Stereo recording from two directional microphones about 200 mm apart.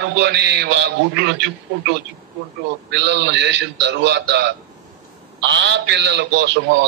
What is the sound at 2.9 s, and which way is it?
A man's voice, 60° right (ahead or behind).